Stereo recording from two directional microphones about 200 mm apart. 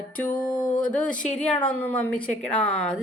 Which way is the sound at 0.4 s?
5° left (ahead or behind).